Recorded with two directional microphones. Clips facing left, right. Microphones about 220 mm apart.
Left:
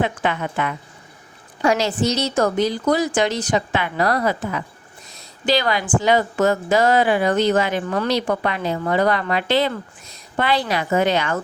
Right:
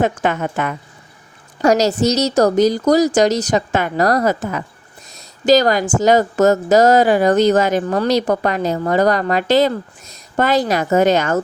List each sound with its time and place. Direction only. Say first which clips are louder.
0.0 s a woman's voice: right 4 dB; 45° right (ahead or behind)